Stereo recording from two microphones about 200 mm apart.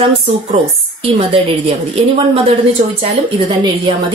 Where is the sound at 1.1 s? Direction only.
30° right (ahead or behind).